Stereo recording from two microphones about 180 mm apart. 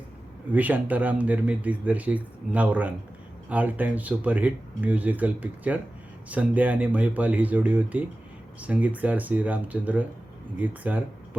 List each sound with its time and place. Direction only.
0.5 s speech: 10° right (ahead or behind)